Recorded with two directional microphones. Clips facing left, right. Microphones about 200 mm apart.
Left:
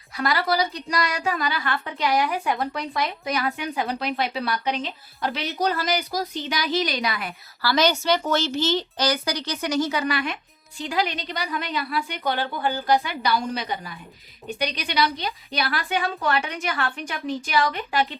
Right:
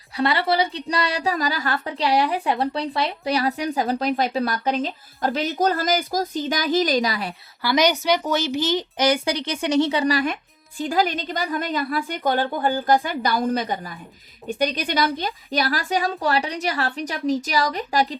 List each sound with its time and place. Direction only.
0.2 s a woman's voice: 30° right (ahead or behind)
7.6 s a woman's voice: 15° right (ahead or behind); by 18.2 s 40° right (ahead or behind)